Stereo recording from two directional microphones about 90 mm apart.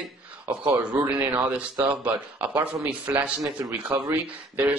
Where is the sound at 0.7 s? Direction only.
20° right (ahead or behind).